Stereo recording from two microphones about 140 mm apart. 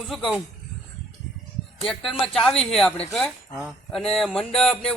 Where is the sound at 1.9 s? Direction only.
Centre (ahead or behind).